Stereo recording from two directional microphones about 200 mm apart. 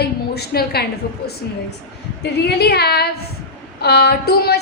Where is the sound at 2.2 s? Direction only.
55° left (ahead or behind).